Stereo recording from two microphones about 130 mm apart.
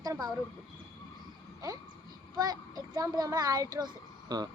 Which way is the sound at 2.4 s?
30° right (ahead or behind).